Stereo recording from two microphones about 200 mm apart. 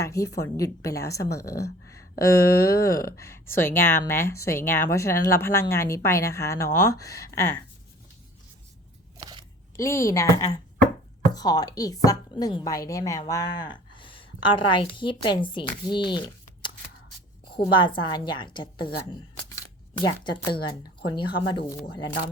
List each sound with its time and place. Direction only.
0.0 s speech: 15° left (ahead or behind)
9.1 s a sound: 20° right (ahead or behind)
9.7 s speech: 15° left (ahead or behind)
20.0 s speech: 20° left (ahead or behind)